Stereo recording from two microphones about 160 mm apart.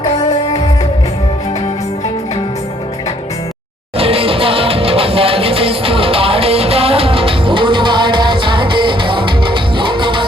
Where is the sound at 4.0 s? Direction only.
35° right (ahead or behind).